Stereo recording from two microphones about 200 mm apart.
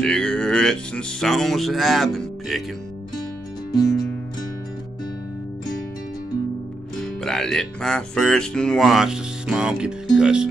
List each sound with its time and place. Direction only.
0.0 s speech: 5° left (ahead or behind)
7.0 s speech: 5° left (ahead or behind)